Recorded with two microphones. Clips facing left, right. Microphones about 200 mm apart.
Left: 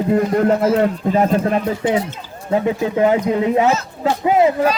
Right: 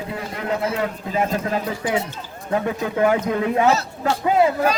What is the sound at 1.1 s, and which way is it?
Speech, 35° left (ahead or behind).